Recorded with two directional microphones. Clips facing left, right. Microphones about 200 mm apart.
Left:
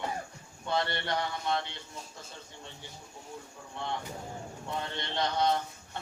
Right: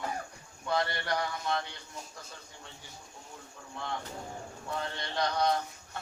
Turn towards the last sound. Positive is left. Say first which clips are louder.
# even
turn(degrees=25)  # may be behind; listen again after turning